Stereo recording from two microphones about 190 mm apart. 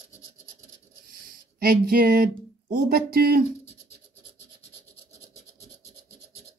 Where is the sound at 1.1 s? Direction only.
50° right (ahead or behind).